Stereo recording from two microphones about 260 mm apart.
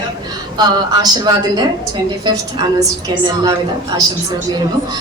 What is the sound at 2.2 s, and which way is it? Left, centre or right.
A woman's voice, centre.